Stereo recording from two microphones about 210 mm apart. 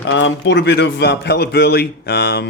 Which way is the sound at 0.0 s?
60° left (ahead or behind).